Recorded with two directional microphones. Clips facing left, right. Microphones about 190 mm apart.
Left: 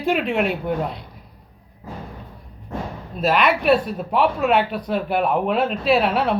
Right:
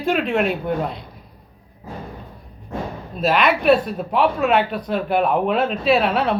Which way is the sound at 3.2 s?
5° left (ahead or behind).